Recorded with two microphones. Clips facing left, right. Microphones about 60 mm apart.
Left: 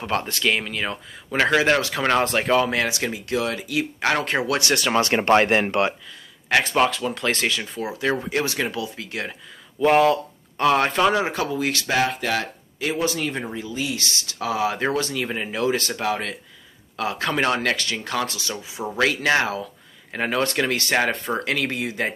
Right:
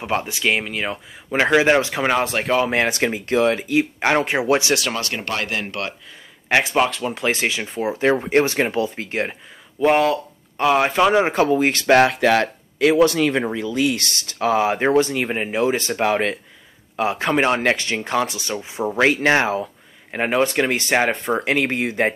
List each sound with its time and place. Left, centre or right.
0.0 s speech: centre
2.1 s speech: centre
2.7 s speech: right
3.0 s speech: right; by 4.7 s centre
4.9 s speech: left
6.6 s speech: centre; by 9.3 s right
9.8 s speech: centre
11.2 s speech: right
11.9 s speech: right
16.1 s speech: right
16.9 s speech: right
18.5 s speech: right